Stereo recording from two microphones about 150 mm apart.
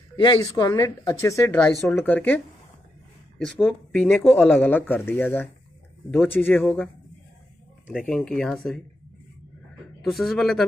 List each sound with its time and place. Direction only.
0.1 s speech: 25° left (ahead or behind)
1.9 s speech: 10° left (ahead or behind)
6.6 s speech: 5° left (ahead or behind)
7.9 s speech: 5° left (ahead or behind)
10.0 s speech: centre (ahead or behind)